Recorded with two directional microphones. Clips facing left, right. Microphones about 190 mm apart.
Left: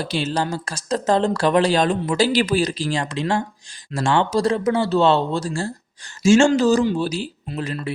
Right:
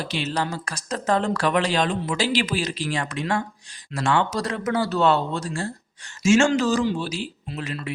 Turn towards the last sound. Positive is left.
turn(degrees=35)  # may be behind; listen again after turning